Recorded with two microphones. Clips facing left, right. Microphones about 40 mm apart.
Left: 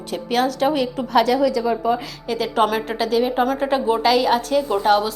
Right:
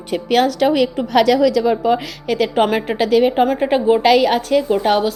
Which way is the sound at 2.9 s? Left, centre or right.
Right.